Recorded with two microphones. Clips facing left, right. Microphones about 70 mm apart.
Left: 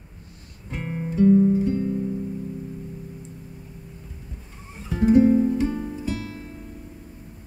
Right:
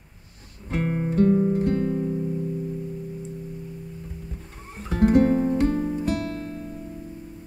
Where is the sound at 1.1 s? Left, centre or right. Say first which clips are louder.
Left 4 dB; right.